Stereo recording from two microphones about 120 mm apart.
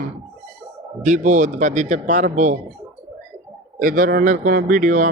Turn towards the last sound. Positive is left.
turn(degrees=-90)